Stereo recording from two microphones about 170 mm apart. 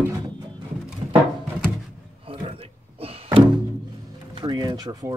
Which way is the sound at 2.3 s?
35° right (ahead or behind).